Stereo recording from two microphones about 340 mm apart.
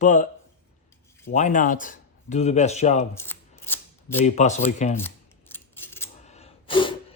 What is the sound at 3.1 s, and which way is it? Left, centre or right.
Shuffling cards, centre.